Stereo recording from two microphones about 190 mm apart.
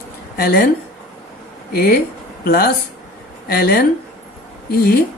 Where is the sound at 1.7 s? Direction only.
50° left (ahead or behind).